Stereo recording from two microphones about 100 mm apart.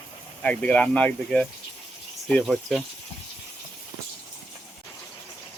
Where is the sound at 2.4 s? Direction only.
Centre (ahead or behind).